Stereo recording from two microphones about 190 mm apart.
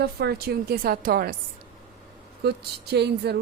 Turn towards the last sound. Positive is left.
turn(degrees=-60)  # may be behind; listen again after turning